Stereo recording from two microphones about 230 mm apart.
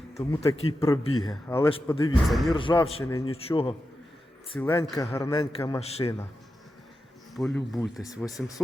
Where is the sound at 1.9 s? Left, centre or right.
Left.